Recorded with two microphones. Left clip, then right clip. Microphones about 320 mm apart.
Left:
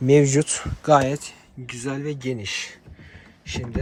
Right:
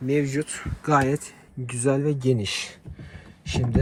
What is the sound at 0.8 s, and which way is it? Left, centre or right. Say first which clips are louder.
Speech: left 4 dB; centre.